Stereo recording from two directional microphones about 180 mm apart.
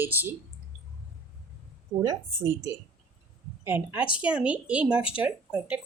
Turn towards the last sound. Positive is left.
turn(degrees=-5)  # may be behind; listen again after turning